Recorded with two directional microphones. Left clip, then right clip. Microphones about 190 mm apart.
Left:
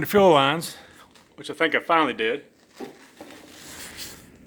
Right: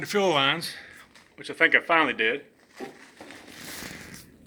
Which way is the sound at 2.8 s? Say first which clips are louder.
Left 1 dB; 10° right (ahead or behind).